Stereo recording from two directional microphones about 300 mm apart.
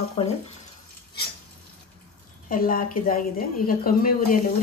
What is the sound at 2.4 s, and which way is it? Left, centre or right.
A woman's voice, left.